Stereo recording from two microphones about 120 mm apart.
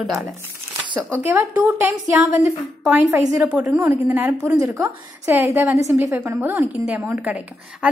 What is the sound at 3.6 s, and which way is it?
Speech, 20° right (ahead or behind).